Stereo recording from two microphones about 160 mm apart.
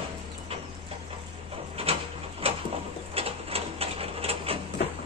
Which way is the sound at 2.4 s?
35° right (ahead or behind).